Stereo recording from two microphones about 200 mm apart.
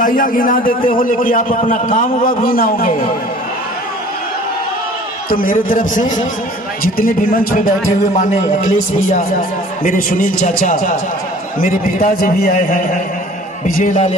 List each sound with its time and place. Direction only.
0.0 s a man's voice: 45° left (ahead or behind)
5.3 s a man's voice: 45° left (ahead or behind)
9.8 s a man's voice: 45° left (ahead or behind)